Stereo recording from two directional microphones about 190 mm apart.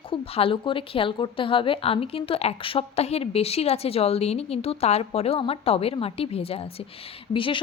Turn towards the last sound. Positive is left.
turn(degrees=25)  # may be behind; listen again after turning